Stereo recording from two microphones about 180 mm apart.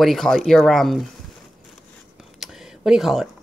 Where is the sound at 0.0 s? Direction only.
Centre (ahead or behind).